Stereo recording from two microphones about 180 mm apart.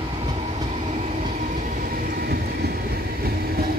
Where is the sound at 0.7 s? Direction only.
35° right (ahead or behind).